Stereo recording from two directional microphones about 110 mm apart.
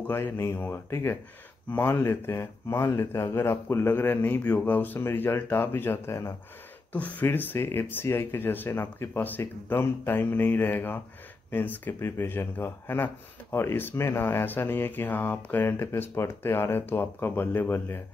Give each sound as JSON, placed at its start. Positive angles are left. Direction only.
{"t": 0.1, "sound": "speech", "side_deg": 20}